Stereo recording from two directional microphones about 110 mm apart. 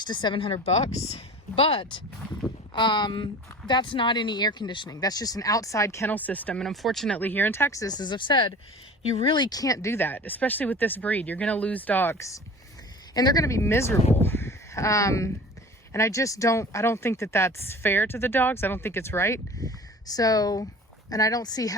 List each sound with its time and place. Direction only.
0.0 s speech: 40° left (ahead or behind); by 7.2 s centre (ahead or behind)
7.2 s speech: 15° left (ahead or behind)
14.2 s crow: 20° left (ahead or behind)
15.9 s speech: 25° left (ahead or behind)